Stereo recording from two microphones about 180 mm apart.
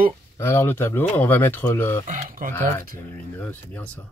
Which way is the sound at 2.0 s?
45° right (ahead or behind).